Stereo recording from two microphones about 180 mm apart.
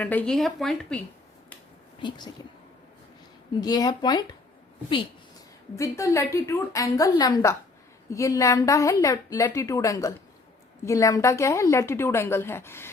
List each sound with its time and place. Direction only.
0.0 s speech: 10° left (ahead or behind)
2.0 s speech: 25° left (ahead or behind)
3.6 s speech: 20° left (ahead or behind)
5.7 s a woman's voice: 15° left (ahead or behind)